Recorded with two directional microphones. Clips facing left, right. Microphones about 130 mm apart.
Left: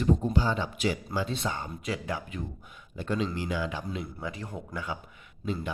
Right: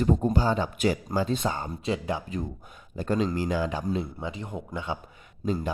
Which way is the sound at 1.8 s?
25° right (ahead or behind).